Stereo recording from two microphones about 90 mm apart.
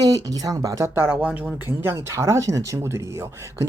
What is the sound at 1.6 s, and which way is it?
Speech, 25° right (ahead or behind).